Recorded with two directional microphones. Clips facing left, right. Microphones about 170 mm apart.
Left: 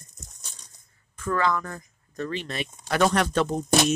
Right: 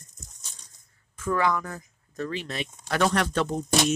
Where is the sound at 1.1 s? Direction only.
10° right (ahead or behind).